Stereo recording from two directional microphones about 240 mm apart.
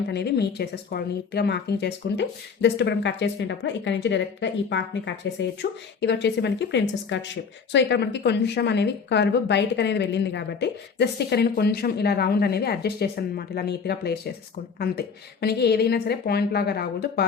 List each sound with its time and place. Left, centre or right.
0.1 s a woman's voice: left